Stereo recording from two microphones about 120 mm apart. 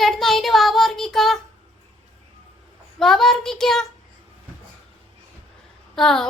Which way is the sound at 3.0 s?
5° left (ahead or behind).